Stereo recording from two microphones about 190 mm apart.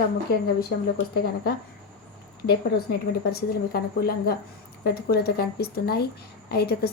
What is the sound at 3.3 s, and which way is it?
A woman's voice, 55° left (ahead or behind).